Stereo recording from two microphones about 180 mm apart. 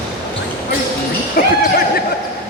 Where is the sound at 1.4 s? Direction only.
55° left (ahead or behind).